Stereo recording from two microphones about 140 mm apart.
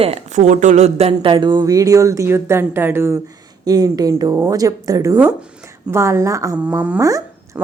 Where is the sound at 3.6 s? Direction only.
25° right (ahead or behind).